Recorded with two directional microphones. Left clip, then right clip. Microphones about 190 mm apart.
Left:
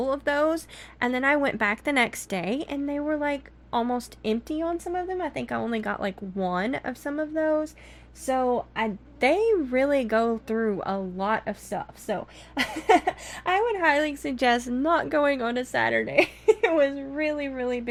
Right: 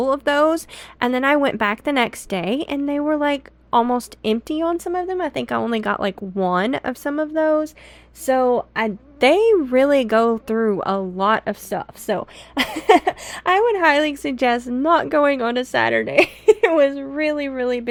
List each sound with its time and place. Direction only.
0.0 s a woman's voice: 30° right (ahead or behind)